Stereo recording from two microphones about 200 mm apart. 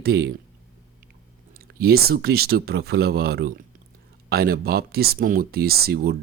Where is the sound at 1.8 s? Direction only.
50° right (ahead or behind).